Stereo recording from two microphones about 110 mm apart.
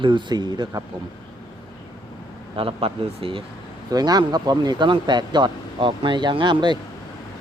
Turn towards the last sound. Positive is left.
turn(degrees=-45)  # may be behind; listen again after turning